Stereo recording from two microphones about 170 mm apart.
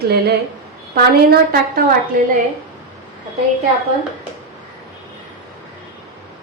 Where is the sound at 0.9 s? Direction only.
65° right (ahead or behind).